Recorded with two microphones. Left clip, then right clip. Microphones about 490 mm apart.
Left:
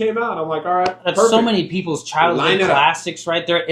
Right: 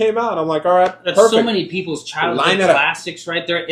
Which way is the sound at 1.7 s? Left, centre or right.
Left.